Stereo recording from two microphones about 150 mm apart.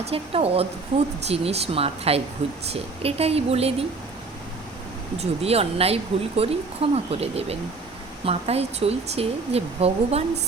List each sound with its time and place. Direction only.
0.0 s speech: 40° right (ahead or behind)
5.1 s speech: 45° right (ahead or behind)